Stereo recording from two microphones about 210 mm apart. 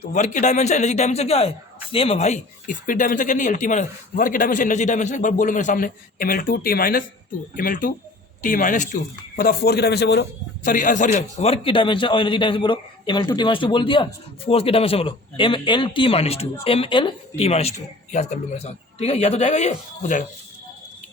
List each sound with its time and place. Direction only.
0.1 s speech: 35° left (ahead or behind)